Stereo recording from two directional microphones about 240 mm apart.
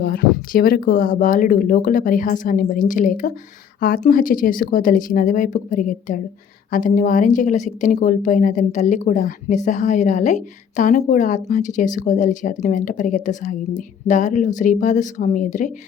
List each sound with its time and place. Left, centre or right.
0.0 s speech: left